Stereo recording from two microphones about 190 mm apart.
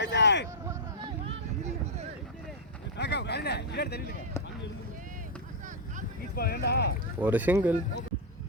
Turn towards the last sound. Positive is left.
turn(degrees=-10)  # may be behind; listen again after turning